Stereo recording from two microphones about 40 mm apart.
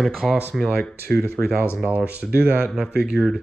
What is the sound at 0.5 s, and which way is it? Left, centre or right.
Speech, centre.